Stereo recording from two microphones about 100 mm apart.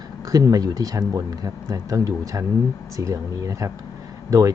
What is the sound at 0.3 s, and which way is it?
Speech, 35° right (ahead or behind).